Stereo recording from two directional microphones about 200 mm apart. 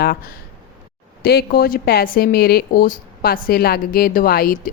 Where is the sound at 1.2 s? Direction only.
50° left (ahead or behind).